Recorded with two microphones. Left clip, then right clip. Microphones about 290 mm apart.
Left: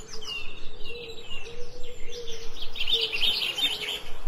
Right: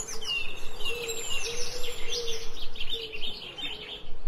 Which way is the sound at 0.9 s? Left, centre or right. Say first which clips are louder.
Right 3 dB; right.